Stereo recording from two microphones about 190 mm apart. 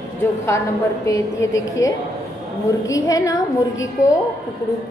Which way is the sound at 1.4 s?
15° left (ahead or behind).